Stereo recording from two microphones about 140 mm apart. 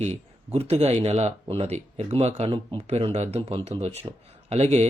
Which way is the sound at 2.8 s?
50° right (ahead or behind).